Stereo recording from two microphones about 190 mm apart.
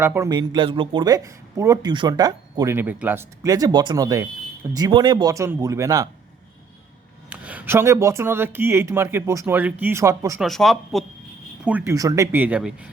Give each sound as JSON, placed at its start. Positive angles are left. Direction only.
{"t": 0.0, "sound": "speech", "side_deg": -15}
{"t": 7.3, "sound": "speech", "side_deg": -10}
{"t": 10.4, "sound": "speech", "side_deg": 0}